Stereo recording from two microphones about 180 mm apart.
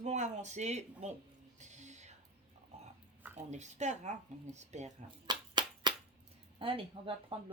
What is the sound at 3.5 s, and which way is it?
Speech, 40° right (ahead or behind).